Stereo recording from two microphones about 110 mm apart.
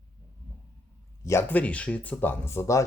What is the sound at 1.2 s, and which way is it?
Speech, 25° left (ahead or behind).